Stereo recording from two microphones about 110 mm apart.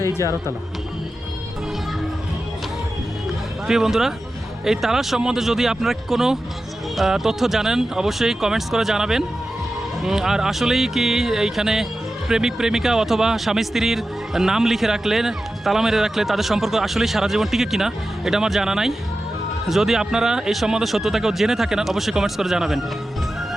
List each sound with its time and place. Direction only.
0.2 s speech: 30° left (ahead or behind)
3.7 s a man's voice: 5° right (ahead or behind)